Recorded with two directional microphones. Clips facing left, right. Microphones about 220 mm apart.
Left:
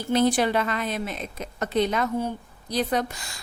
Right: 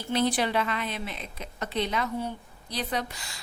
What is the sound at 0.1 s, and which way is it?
A woman's voice, 45° left (ahead or behind).